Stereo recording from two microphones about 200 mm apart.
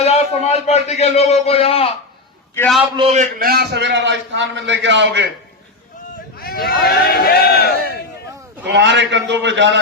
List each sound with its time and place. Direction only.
0.0 s a man's voice: 30° left (ahead or behind)
2.6 s a man's voice: centre (ahead or behind)
2.9 s a man's voice: 30° right (ahead or behind)
3.3 s a man's voice: 50° right (ahead or behind)
6.3 s a sound: 50° left (ahead or behind)
8.6 s a man's voice: 65° right (ahead or behind)